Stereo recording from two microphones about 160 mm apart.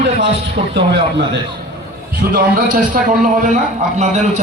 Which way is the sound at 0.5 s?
90° right.